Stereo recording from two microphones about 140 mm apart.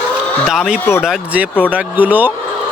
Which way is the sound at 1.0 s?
10° right (ahead or behind).